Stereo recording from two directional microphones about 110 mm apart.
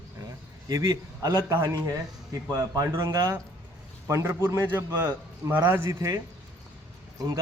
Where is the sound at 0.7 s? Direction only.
30° right (ahead or behind).